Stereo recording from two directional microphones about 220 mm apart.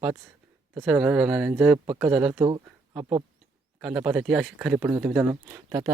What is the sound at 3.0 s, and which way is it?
Speech, 20° right (ahead or behind).